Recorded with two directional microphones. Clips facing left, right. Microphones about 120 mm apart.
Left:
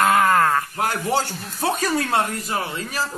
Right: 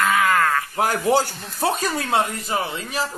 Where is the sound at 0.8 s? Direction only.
40° right (ahead or behind).